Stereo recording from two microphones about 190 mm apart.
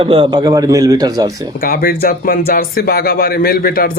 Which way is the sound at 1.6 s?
50° left (ahead or behind).